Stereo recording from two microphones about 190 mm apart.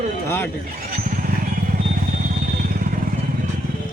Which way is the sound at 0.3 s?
10° left (ahead or behind).